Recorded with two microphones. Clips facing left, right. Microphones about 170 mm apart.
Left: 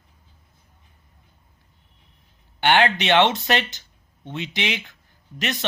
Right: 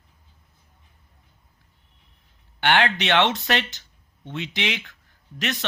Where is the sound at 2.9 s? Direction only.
5° left (ahead or behind).